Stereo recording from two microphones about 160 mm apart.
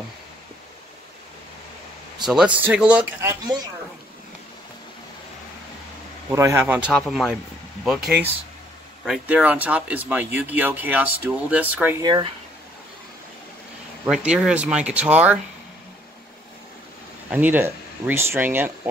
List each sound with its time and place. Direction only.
2.2 s speech: 5° right (ahead or behind)
6.3 s speech: 15° right (ahead or behind)
12.0 s speech: 30° right (ahead or behind)
14.0 s speech: 5° right (ahead or behind)
17.3 s speech: 10° right (ahead or behind)